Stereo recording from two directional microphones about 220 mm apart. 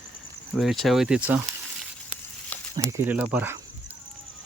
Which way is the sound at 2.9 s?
10° right (ahead or behind).